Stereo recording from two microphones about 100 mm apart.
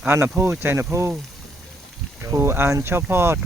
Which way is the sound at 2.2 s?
25° right (ahead or behind).